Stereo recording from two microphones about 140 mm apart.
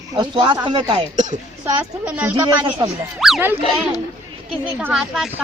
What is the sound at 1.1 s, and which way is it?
Speech, 60° right (ahead or behind).